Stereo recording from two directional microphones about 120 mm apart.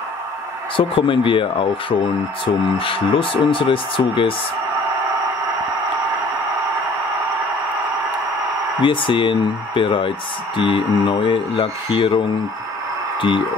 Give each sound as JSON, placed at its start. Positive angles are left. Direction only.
{"t": 0.7, "sound": "speech", "side_deg": 45}
{"t": 8.8, "sound": "speech", "side_deg": 45}